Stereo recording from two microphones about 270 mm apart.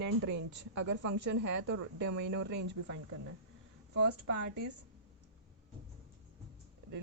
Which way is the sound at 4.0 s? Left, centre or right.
Right.